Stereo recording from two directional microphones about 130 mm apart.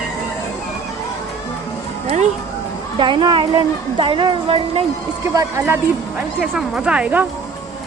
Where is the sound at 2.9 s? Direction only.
40° right (ahead or behind).